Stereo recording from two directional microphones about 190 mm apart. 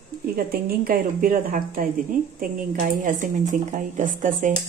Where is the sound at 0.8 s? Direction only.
50° right (ahead or behind).